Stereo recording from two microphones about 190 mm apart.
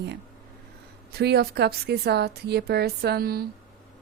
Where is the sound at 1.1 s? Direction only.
60° right (ahead or behind).